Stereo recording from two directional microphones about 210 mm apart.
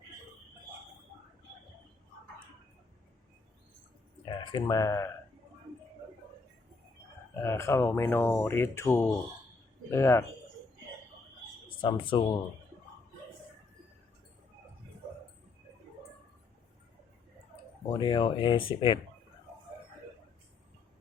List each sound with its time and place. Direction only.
4.5 s speech: 15° left (ahead or behind)
7.4 s speech: 15° left (ahead or behind)
11.8 s speech: 20° left (ahead or behind)
17.9 s speech: 20° left (ahead or behind)